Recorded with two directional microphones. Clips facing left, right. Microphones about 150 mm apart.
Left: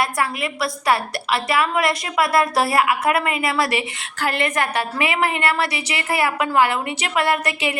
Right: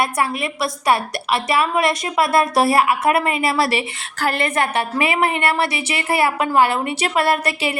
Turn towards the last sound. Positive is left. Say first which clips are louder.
# right 2 dB
turn(degrees=-30)  # may be behind; listen again after turning